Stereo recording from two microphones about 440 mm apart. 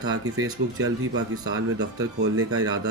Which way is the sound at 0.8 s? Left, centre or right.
Right.